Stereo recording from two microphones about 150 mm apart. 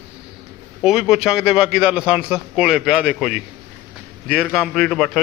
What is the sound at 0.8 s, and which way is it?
A man's voice, 5° right (ahead or behind).